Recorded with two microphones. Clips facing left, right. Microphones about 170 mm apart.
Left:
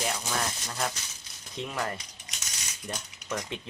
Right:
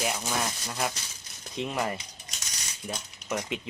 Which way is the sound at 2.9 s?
5° right (ahead or behind).